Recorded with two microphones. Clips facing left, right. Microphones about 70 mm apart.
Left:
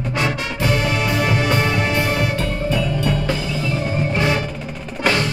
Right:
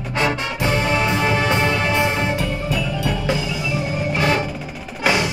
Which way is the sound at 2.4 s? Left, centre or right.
Centre.